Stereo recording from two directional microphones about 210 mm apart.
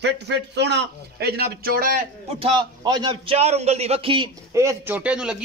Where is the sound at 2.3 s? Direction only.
25° right (ahead or behind).